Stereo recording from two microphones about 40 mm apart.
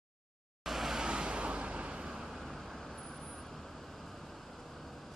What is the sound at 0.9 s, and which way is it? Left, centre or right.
Vehicle, right.